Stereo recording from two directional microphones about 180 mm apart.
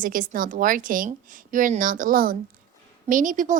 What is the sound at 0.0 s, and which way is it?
A woman's voice, 50° right (ahead or behind).